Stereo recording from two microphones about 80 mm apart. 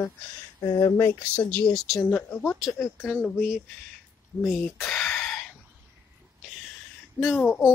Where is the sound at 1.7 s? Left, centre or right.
Centre.